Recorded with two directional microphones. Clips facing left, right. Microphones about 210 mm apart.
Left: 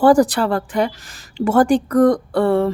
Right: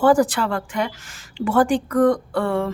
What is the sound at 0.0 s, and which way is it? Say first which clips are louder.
A woman's voice: left 3 dB; 40° left (ahead or behind).